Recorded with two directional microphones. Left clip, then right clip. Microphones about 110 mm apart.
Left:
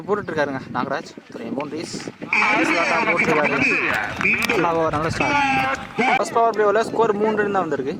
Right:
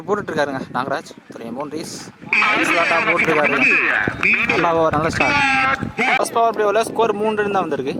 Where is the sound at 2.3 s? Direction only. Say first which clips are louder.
Right 2 dB; 40° right (ahead or behind).